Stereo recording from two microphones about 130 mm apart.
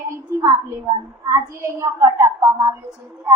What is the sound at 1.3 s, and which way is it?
A child's voice, 25° right (ahead or behind).